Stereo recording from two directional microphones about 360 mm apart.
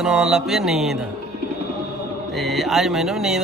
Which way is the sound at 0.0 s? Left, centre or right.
Centre.